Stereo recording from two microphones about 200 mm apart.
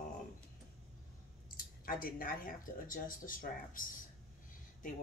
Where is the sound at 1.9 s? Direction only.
45° left (ahead or behind).